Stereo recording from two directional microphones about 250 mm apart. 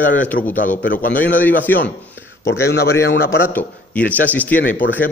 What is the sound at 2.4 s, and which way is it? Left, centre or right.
Speech, left.